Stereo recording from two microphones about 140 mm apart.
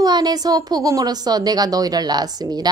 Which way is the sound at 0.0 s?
30° right (ahead or behind).